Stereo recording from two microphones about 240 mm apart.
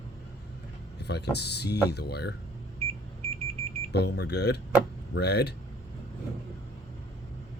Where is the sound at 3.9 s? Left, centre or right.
Left.